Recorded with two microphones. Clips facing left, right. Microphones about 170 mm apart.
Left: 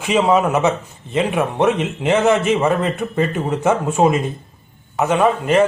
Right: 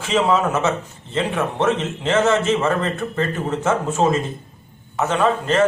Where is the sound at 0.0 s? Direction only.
15° left (ahead or behind).